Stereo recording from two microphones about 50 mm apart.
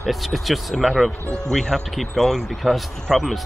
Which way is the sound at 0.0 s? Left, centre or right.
Centre.